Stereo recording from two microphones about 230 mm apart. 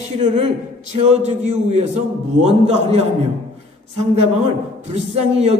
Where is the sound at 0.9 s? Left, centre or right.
Right.